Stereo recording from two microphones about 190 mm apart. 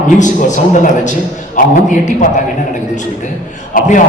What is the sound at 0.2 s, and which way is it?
A man's voice, 40° left (ahead or behind).